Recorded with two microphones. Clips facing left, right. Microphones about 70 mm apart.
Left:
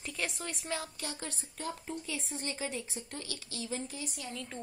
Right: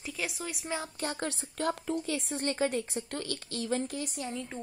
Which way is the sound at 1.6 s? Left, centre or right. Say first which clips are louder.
Right 8 dB; right.